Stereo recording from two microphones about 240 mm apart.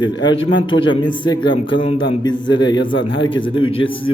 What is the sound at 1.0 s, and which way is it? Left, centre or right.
A man's voice, centre.